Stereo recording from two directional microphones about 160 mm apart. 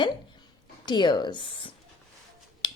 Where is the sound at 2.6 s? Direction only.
30° left (ahead or behind).